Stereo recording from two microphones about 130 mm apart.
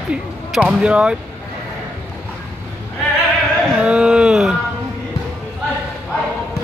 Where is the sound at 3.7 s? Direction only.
5° right (ahead or behind).